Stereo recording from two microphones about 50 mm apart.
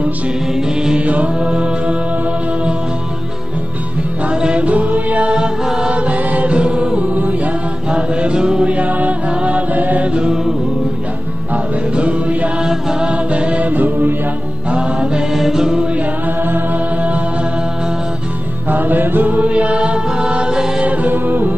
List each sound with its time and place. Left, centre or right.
0.6 s music: centre
1.0 s mantra: right
4.3 s music: right
5.3 s music: centre
5.9 s music: right
7.9 s mantra: right
8.7 s music: right
9.8 s mantra: right
10.1 s mantra: centre
11.5 s music: right
14.7 s mantra: centre
15.3 s music: centre
18.7 s music: right; by 20.8 s centre
20.8 s music: right